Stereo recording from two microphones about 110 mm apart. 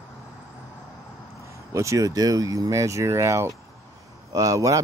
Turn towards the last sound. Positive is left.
turn(degrees=-30)  # may be behind; listen again after turning